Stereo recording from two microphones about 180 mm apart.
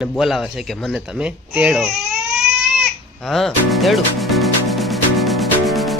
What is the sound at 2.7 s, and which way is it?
Music, centre (ahead or behind).